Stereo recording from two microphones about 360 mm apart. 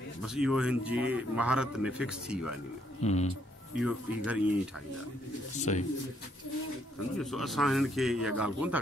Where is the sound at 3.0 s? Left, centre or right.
Centre.